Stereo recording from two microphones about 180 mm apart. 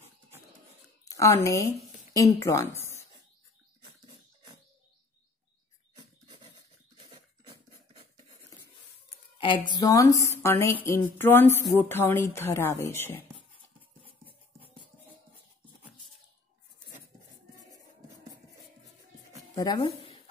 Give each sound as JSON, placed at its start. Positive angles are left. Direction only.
{"t": 1.0, "sound": "a woman's voice", "side_deg": 20}
{"t": 5.9, "sound": "filing", "side_deg": -25}
{"t": 7.1, "sound": "a sound", "side_deg": -30}
{"t": 9.4, "sound": "a woman's voice", "side_deg": 25}
{"t": 19.5, "sound": "speech", "side_deg": 20}